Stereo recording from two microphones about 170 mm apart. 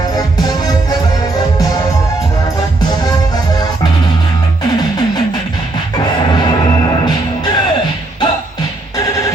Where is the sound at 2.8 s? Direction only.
25° left (ahead or behind).